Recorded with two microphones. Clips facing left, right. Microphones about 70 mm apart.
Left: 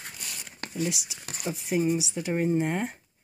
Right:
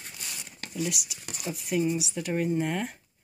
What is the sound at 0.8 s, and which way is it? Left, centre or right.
Speech, left.